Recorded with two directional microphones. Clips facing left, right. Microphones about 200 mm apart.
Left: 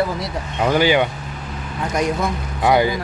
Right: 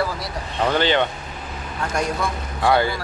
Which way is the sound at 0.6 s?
10° left (ahead or behind).